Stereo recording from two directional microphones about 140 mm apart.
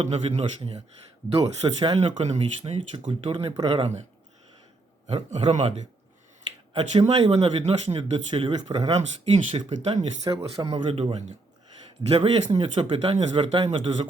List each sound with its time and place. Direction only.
0.0 s a man's voice: 50° right (ahead or behind)
1.4 s speech: 35° right (ahead or behind)
2.0 s a man's voice: 45° right (ahead or behind)
5.0 s a man's voice: 45° right (ahead or behind)
7.2 s speech: 40° right (ahead or behind)
8.9 s a man's voice: 50° right (ahead or behind)
10.6 s a man's voice: 35° right (ahead or behind)